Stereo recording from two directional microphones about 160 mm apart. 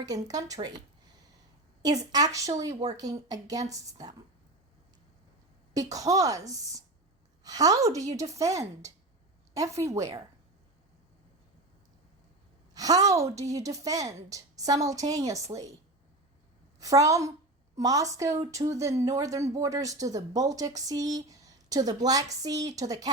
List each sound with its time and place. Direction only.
0.0 s speech: 20° right (ahead or behind)
1.8 s speech: 25° right (ahead or behind)
5.7 s speech: 20° right (ahead or behind)
12.7 s speech: 25° right (ahead or behind)
16.8 s speech: 20° right (ahead or behind)